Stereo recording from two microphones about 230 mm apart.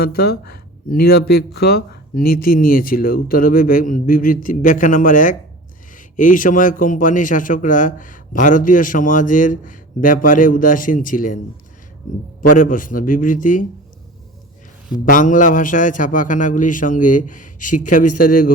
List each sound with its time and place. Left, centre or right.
0.0 s a man's voice: left
12.4 s a man's voice: left
15.0 s a man's voice: left